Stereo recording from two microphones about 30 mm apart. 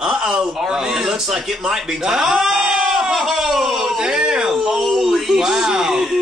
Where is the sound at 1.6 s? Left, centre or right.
Centre.